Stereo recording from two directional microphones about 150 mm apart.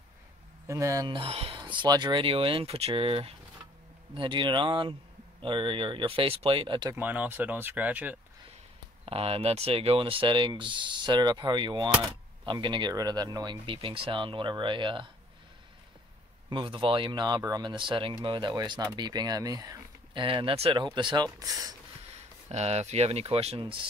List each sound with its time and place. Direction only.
0.7 s speech: 20° right (ahead or behind)
1.1 s speech: 40° right (ahead or behind)
1.6 s speech: 30° right (ahead or behind)
7.0 s speech: 10° right (ahead or behind)
9.0 s speech: 40° right (ahead or behind)
16.4 s speech: 35° right (ahead or behind)
20.2 s speech: 35° right (ahead or behind)
22.5 s speech: 45° right (ahead or behind)